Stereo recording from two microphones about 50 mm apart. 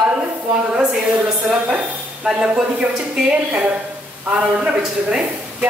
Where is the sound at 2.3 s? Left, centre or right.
Centre.